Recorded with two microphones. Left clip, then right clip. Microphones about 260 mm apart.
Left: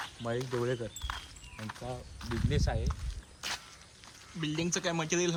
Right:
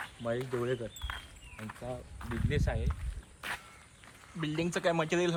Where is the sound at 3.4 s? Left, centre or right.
Centre.